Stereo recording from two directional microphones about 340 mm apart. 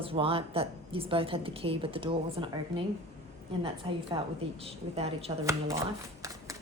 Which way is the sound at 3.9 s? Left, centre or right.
Centre.